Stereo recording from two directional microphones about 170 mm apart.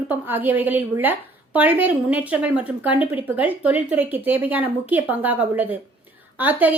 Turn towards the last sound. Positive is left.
turn(degrees=-10)  # may be behind; listen again after turning